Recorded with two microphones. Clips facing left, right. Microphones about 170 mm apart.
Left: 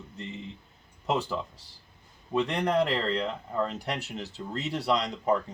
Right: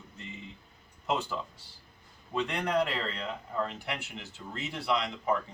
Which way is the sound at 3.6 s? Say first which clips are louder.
Left 4 dB; 40° left (ahead or behind).